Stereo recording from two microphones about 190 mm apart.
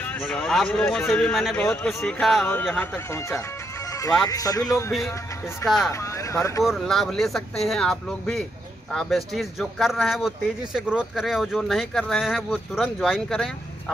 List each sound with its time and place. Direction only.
0.0 s speech: 5° left (ahead or behind)
6.6 s speech: centre (ahead or behind)